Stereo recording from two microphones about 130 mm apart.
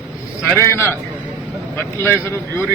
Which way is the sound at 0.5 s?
20° left (ahead or behind).